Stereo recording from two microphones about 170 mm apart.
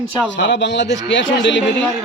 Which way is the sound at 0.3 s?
90° left.